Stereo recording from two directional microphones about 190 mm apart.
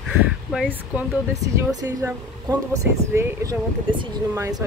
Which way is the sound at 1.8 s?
15° right (ahead or behind).